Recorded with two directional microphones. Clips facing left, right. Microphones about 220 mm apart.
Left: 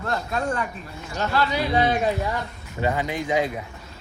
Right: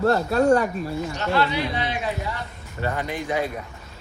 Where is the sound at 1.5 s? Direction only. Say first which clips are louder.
Left 4 dB; 45° left (ahead or behind).